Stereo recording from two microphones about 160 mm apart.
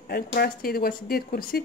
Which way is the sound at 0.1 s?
70° left (ahead or behind).